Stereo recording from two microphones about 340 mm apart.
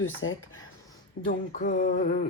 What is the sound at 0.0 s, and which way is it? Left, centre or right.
Speech, left.